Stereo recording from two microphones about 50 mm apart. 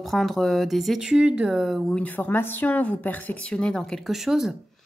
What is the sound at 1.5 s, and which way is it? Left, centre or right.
Speech, centre.